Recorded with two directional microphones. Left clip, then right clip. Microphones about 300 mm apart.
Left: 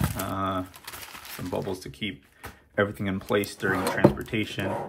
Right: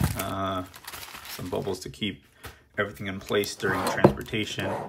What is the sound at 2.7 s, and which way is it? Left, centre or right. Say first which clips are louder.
Speech: left 4 dB; centre.